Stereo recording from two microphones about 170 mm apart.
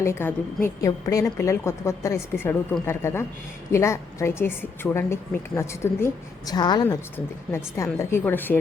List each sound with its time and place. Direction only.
0.0 s a woman's voice: 15° left (ahead or behind)